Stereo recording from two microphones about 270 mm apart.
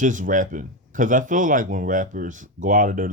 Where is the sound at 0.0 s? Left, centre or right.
Right.